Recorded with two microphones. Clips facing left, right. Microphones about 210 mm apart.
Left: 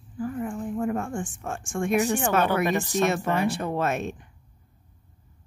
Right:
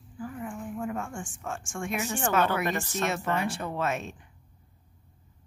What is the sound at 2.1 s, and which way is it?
Speech, 15° left (ahead or behind).